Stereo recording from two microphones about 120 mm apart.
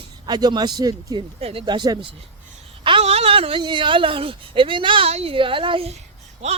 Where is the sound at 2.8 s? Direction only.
50° right (ahead or behind).